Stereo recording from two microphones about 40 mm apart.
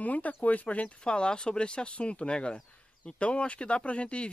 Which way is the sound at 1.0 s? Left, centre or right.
Left.